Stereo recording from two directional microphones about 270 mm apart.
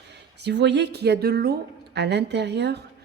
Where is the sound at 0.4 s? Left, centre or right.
Right.